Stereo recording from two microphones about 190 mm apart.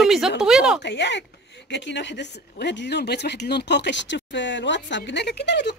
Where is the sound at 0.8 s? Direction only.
65° left (ahead or behind).